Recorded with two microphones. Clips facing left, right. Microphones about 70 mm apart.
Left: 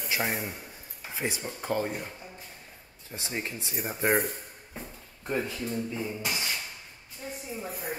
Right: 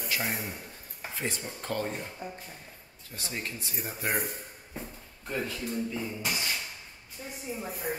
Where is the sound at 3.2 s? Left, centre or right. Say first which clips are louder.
Left 2 dB; left.